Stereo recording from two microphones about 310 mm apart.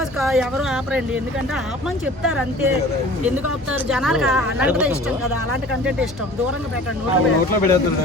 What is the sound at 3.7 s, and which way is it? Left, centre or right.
A woman's voice, centre.